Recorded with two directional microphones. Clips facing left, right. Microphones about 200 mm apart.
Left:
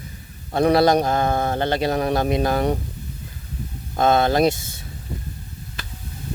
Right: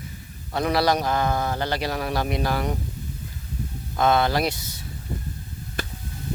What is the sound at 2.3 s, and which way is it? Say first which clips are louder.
Speech: left 5 dB; 20° left (ahead or behind).